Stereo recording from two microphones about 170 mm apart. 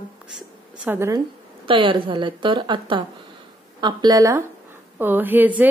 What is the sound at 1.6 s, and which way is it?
A woman's voice, 30° right (ahead or behind).